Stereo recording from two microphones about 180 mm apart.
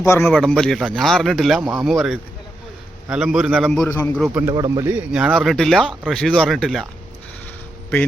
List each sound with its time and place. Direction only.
0.0 s a man's voice: 15° left (ahead or behind)
0.3 s speech: 5° left (ahead or behind)
3.8 s a man's voice: 15° left (ahead or behind)
4.4 s speech: 20° right (ahead or behind)
4.9 s speech: 5° right (ahead or behind)